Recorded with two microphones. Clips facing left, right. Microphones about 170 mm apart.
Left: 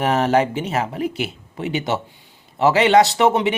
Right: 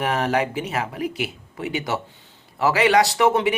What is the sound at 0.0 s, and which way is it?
Speech, 30° left (ahead or behind).